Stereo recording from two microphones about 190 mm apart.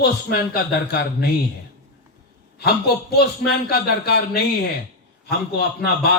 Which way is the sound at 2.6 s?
55° left (ahead or behind).